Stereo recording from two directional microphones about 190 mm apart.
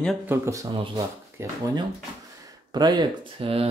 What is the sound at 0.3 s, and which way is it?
Speech, 15° right (ahead or behind).